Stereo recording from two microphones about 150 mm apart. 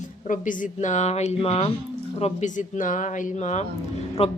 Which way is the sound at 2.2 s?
50° left (ahead or behind).